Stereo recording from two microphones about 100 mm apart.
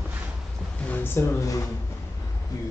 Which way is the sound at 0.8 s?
20° left (ahead or behind).